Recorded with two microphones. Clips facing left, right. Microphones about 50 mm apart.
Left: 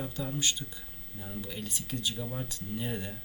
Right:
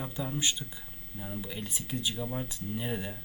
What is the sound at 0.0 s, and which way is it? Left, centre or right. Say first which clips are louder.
Speech: even; centre.